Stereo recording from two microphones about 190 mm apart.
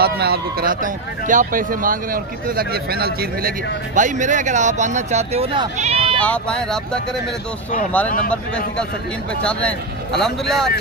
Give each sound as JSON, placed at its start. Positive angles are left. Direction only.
{"t": 0.0, "sound": "speech", "side_deg": -55}
{"t": 6.2, "sound": "speech", "side_deg": 5}
{"t": 8.3, "sound": "speech", "side_deg": 5}